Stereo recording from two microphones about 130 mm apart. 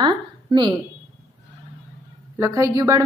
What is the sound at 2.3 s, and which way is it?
Speech, 20° right (ahead or behind).